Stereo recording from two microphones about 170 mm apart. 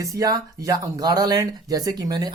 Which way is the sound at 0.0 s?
20° right (ahead or behind).